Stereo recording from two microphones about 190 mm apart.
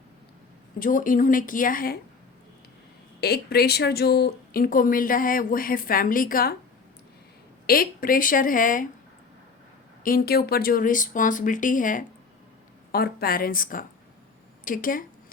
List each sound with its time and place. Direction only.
0.8 s speech: 45° left (ahead or behind)
3.2 s speech: 55° left (ahead or behind)
7.7 s speech: 50° left (ahead or behind)
10.0 s speech: 50° left (ahead or behind)